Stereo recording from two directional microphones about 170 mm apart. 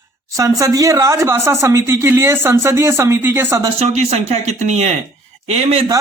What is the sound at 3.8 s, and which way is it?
Speech, 40° right (ahead or behind).